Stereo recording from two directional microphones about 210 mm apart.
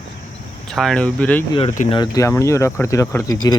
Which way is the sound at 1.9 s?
20° left (ahead or behind).